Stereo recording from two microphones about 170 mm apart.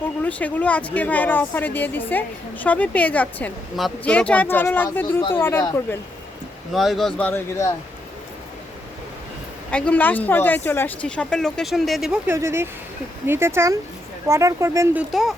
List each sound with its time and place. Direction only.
0.2 s speech: 10° left (ahead or behind)
6.7 s speech: centre (ahead or behind)
9.7 s speech: 10° left (ahead or behind)
12.3 s speech: 15° right (ahead or behind)
15.1 s speech: centre (ahead or behind)